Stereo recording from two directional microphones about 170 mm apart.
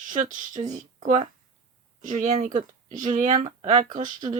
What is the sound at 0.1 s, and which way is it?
Speech, 45° right (ahead or behind).